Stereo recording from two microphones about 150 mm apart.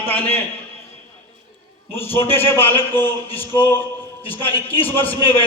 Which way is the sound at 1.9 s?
15° left (ahead or behind).